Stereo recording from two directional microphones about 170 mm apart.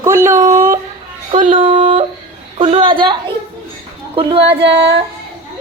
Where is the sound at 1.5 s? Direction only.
30° right (ahead or behind).